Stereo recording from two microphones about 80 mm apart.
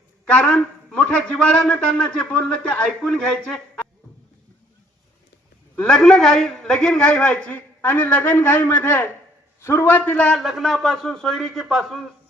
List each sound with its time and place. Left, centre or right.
0.3 s a man's voice: centre
5.9 s a man's voice: centre
7.8 s a man's voice: left
10.3 s a man's voice: centre